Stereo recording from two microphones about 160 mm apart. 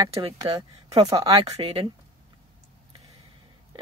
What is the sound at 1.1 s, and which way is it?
Speech, 35° right (ahead or behind).